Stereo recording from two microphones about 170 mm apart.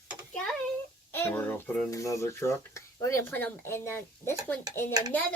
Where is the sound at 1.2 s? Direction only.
10° left (ahead or behind).